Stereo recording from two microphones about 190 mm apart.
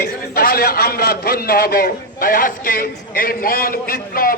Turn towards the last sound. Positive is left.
turn(degrees=50)  # may be behind; listen again after turning